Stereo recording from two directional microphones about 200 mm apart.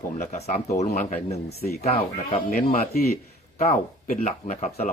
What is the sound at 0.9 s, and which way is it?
Speech, 45° left (ahead or behind).